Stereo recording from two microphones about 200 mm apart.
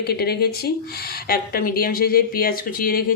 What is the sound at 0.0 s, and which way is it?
A woman's voice, 50° left (ahead or behind).